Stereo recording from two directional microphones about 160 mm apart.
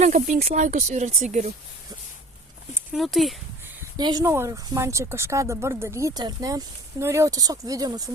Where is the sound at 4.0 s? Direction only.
25° right (ahead or behind).